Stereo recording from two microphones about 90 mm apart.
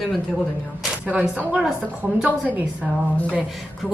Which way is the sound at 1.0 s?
15° right (ahead or behind).